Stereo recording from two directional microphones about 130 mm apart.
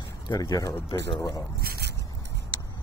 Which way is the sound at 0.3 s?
30° left (ahead or behind).